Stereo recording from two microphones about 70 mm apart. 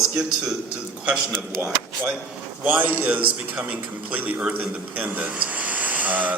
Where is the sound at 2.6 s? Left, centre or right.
Right.